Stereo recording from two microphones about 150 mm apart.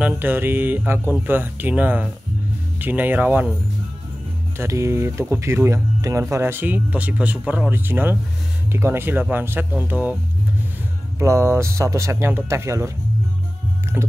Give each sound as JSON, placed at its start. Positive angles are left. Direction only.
{"t": 0.0, "sound": "speech", "side_deg": -15}
{"t": 4.6, "sound": "speech", "side_deg": -20}
{"t": 11.1, "sound": "speech", "side_deg": -20}
{"t": 14.0, "sound": "speech", "side_deg": -15}